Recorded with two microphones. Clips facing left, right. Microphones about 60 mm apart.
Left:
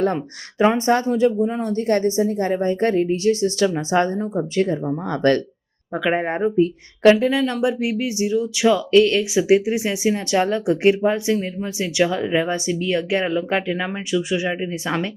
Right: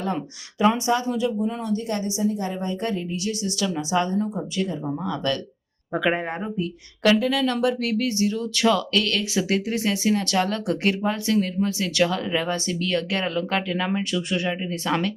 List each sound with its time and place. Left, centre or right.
0.8 s a woman's voice: left
1.7 s a woman's voice: left
5.9 s speech: centre
6.1 s speech: left; by 15.1 s centre